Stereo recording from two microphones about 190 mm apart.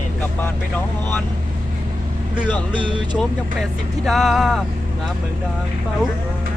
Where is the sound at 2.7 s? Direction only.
25° right (ahead or behind).